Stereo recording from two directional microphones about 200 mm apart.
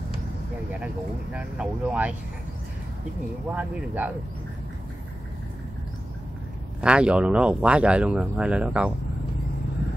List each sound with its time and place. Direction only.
1.3 s speech: 5° right (ahead or behind)
3.5 s speech: 5° right (ahead or behind)
6.8 s speech: 5° right (ahead or behind)